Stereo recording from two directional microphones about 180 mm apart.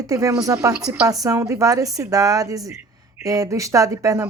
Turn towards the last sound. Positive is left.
turn(degrees=-20)  # may be behind; listen again after turning